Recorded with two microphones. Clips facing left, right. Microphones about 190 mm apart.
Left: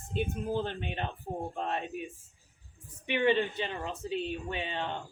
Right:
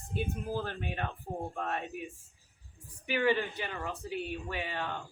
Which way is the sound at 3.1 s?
20° left (ahead or behind).